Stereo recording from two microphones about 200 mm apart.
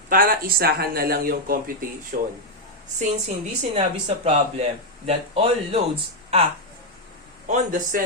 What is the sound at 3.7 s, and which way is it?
Speech, 30° right (ahead or behind).